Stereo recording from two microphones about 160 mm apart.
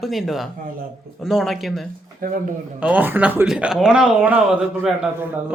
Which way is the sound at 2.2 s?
65° right (ahead or behind).